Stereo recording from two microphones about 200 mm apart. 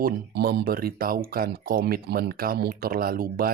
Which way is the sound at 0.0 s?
55° right (ahead or behind).